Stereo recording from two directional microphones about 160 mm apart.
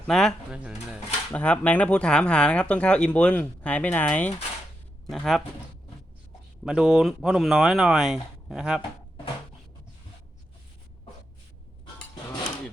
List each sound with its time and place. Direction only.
0.1 s speech: 5° left (ahead or behind)
1.3 s speech: 10° left (ahead or behind)
6.7 s speech: 5° right (ahead or behind)